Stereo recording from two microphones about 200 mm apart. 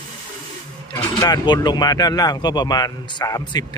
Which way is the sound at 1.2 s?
20° left (ahead or behind).